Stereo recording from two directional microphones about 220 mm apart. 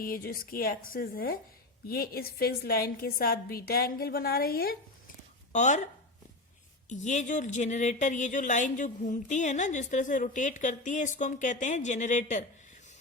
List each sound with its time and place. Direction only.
0.0 s a woman's voice: 40° left (ahead or behind)
5.5 s speech: 35° left (ahead or behind)